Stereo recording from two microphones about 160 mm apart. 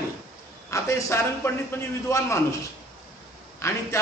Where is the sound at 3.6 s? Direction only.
20° left (ahead or behind).